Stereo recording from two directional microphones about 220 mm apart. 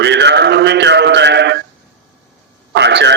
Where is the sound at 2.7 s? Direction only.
50° right (ahead or behind).